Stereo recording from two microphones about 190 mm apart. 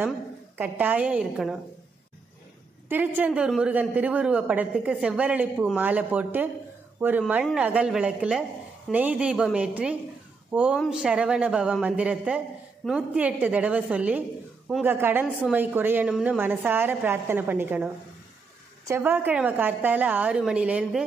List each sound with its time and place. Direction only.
0.6 s a woman's voice: 10° right (ahead or behind)
2.9 s a woman's voice: 10° right (ahead or behind)
18.9 s a woman's voice: 10° right (ahead or behind)